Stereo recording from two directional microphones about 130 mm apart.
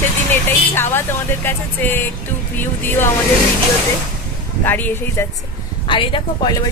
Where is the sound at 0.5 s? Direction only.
15° left (ahead or behind).